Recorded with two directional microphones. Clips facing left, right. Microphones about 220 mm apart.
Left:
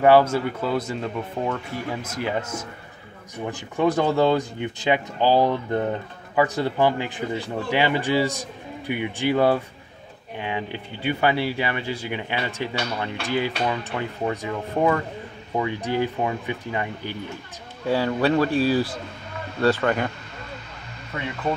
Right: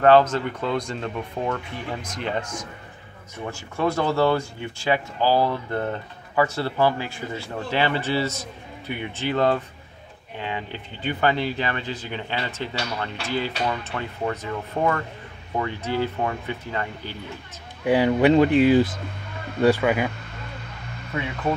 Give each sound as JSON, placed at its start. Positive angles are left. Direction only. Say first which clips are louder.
{"t": 0.0, "sound": "speech", "louder": "even", "side_deg": 10}
{"t": 3.4, "sound": "speech", "louder": "left 3 dB", "side_deg": 15}
{"t": 17.8, "sound": "speech", "louder": "right 4 dB", "side_deg": -15}